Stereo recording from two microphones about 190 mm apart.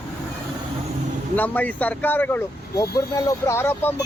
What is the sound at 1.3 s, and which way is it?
Speech, 10° left (ahead or behind).